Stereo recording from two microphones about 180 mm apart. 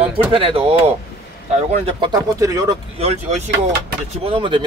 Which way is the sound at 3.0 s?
35° right (ahead or behind).